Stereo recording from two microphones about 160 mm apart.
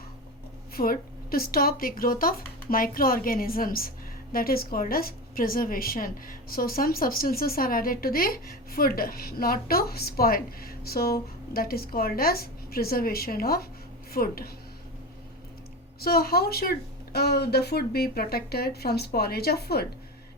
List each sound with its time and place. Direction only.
0.7 s speech: 65° left (ahead or behind)
16.0 s speech: 70° left (ahead or behind)